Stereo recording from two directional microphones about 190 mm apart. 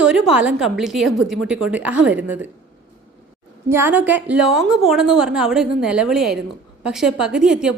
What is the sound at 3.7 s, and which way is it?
A woman's voice, 10° right (ahead or behind).